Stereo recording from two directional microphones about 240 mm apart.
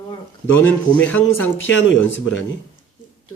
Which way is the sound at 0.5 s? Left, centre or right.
Centre.